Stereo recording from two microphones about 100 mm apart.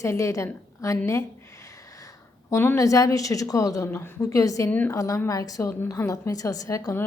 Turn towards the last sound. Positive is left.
turn(degrees=30)  # may be behind; listen again after turning